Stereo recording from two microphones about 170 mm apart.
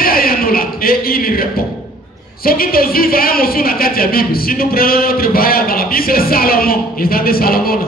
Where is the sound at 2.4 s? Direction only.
60° left (ahead or behind).